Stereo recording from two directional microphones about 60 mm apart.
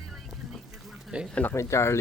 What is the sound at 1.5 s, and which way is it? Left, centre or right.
Speech, left.